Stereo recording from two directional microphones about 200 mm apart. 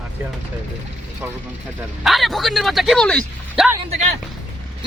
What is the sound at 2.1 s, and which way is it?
Speech, centre (ahead or behind).